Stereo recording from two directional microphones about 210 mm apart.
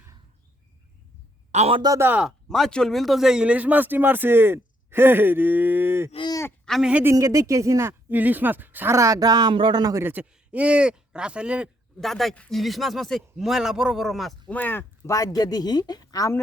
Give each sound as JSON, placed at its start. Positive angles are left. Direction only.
{"t": 1.5, "sound": "speech", "side_deg": -25}
{"t": 6.1, "sound": "speech", "side_deg": 20}
{"t": 6.7, "sound": "speech", "side_deg": 0}